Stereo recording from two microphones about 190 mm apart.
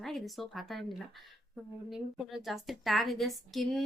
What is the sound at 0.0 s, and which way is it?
Speech, centre (ahead or behind).